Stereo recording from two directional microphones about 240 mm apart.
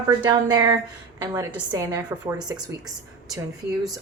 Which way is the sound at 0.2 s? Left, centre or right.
Centre.